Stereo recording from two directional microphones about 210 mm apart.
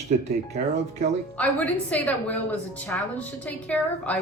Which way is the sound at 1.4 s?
5° left (ahead or behind).